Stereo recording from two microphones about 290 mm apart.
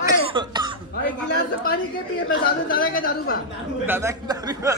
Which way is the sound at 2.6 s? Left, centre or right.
Left.